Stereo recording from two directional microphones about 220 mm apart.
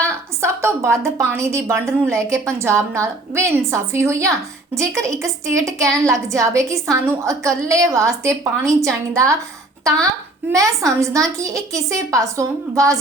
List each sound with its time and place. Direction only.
0.0 s a woman's voice: 10° right (ahead or behind)
10.5 s a woman's voice: 15° right (ahead or behind)